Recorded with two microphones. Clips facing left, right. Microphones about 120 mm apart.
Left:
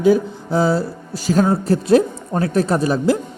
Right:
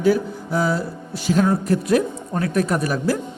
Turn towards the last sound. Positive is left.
turn(degrees=25)  # may be behind; listen again after turning